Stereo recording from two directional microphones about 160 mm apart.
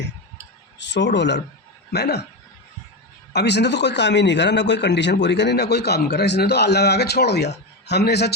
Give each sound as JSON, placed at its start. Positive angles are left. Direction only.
{"t": 0.8, "sound": "a man's voice", "side_deg": 90}
{"t": 3.3, "sound": "a man's voice", "side_deg": 90}